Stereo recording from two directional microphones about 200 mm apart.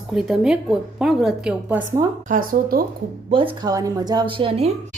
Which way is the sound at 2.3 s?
45° right (ahead or behind).